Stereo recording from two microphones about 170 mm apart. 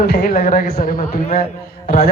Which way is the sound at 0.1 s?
65° left (ahead or behind).